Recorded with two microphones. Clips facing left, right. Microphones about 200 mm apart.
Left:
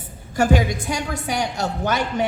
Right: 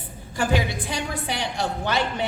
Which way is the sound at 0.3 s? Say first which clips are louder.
Left 5 dB; 45° left (ahead or behind).